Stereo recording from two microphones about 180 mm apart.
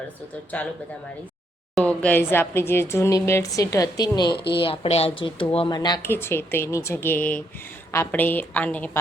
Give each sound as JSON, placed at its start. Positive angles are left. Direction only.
{"t": 1.7, "sound": "a woman's voice", "side_deg": 5}
{"t": 6.0, "sound": "a woman's voice", "side_deg": 10}